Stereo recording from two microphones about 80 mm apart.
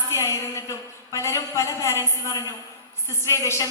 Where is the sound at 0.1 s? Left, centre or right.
Left.